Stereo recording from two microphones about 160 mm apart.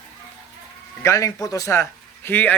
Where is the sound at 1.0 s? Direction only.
20° left (ahead or behind).